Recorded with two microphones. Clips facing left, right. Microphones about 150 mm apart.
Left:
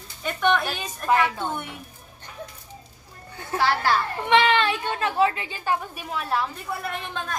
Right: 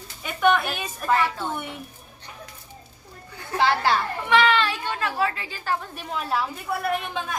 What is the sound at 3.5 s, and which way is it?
Speech, 20° right (ahead or behind).